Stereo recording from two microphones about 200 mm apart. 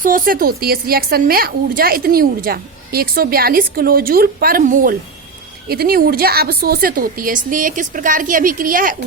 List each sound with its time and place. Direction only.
0.0 s a woman's voice: 45° right (ahead or behind)